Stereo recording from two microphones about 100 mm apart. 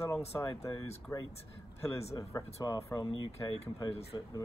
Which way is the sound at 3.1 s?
45° left (ahead or behind).